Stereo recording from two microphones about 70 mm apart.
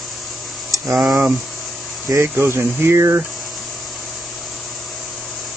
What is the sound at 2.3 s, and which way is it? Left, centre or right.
Speech, right.